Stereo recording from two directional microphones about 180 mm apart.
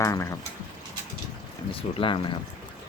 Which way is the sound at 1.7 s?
30° left (ahead or behind).